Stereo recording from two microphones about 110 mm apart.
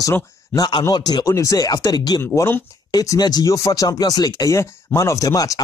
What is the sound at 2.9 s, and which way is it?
Speech, 35° left (ahead or behind).